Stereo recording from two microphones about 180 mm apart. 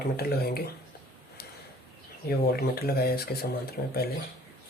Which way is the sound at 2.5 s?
60° left (ahead or behind).